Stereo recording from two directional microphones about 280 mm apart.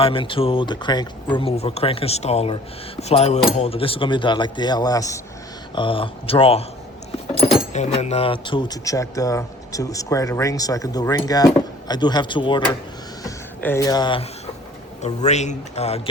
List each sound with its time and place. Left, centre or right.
0.0 s speech: centre